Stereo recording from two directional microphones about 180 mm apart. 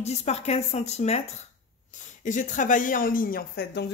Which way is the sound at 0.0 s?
35° left (ahead or behind).